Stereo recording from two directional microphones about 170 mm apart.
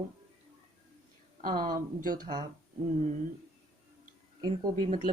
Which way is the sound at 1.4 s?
55° right (ahead or behind).